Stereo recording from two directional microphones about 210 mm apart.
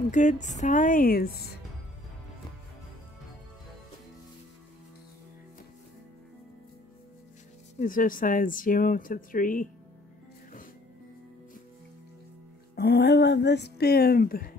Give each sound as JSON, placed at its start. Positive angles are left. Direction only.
{"t": 0.1, "sound": "speech", "side_deg": 35}
{"t": 7.8, "sound": "speech", "side_deg": 40}
{"t": 12.7, "sound": "speech", "side_deg": 50}